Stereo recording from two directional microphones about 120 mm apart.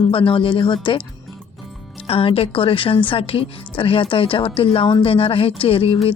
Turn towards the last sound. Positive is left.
turn(degrees=50)  # may be behind; listen again after turning